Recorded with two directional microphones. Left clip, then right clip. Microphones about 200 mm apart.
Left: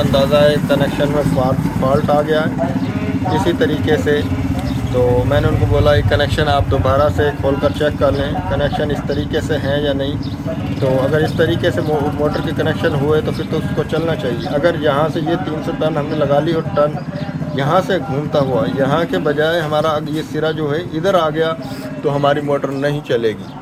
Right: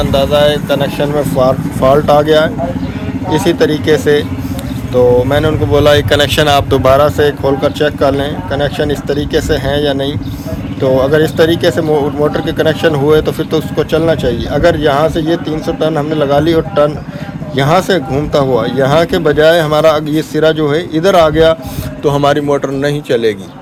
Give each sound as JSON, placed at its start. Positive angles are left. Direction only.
{"t": 0.0, "sound": "speech", "side_deg": -45}
{"t": 11.1, "sound": "a man's voice", "side_deg": -60}